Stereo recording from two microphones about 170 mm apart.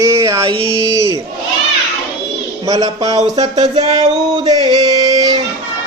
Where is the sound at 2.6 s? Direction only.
20° right (ahead or behind).